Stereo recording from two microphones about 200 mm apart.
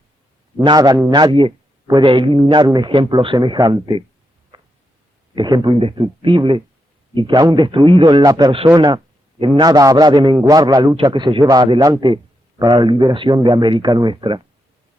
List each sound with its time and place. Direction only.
0.5 s a man's voice: 25° right (ahead or behind)
4.5 s a sound: 25° right (ahead or behind)
5.3 s a man's voice: 25° right (ahead or behind)